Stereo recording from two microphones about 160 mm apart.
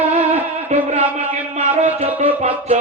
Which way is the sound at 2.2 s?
50° right (ahead or behind).